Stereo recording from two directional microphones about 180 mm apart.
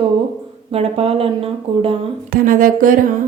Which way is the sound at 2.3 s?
50° right (ahead or behind).